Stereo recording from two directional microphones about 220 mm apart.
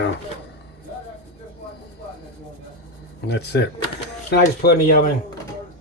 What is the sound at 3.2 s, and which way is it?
Speech, 50° left (ahead or behind).